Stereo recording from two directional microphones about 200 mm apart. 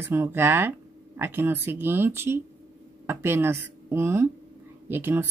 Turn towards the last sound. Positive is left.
turn(degrees=-10)  # may be behind; listen again after turning